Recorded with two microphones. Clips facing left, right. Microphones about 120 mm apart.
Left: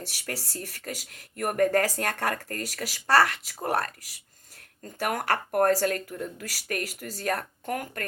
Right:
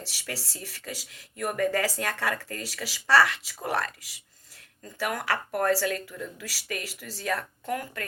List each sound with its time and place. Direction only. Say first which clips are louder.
0.0 s speech: left 2 dB; 50° left (ahead or behind)